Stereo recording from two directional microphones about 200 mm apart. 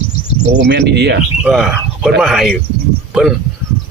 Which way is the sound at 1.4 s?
Centre (ahead or behind).